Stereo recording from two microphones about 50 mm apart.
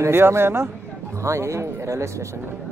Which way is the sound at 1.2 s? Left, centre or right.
Right.